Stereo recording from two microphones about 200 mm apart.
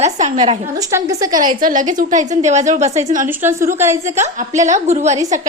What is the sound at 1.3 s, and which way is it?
A woman's voice, 45° right (ahead or behind).